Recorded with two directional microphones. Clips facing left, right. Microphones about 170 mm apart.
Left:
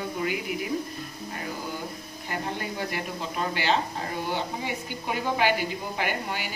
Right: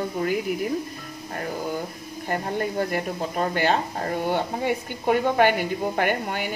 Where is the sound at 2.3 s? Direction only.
45° right (ahead or behind).